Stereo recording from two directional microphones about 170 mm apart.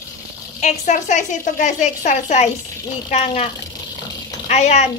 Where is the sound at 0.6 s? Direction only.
45° left (ahead or behind).